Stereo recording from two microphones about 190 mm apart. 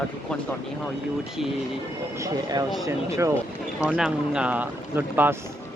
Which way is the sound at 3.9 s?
5° right (ahead or behind).